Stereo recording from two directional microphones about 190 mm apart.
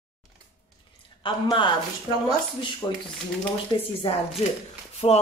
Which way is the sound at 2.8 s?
15° left (ahead or behind).